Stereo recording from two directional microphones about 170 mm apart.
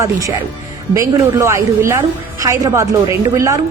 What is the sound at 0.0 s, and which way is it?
A woman's voice, 20° right (ahead or behind).